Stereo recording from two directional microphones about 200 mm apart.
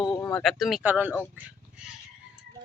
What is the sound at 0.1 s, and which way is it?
Speech, 10° left (ahead or behind).